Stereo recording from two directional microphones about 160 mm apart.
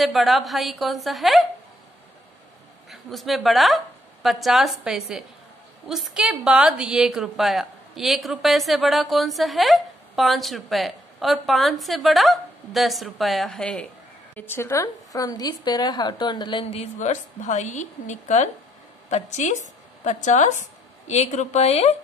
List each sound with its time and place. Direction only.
0.0 s a woman's voice: centre (ahead or behind)
2.9 s a woman's voice: centre (ahead or behind); by 21.9 s 40° left (ahead or behind)